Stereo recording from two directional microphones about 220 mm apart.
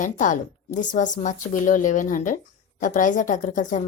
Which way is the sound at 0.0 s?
35° left (ahead or behind).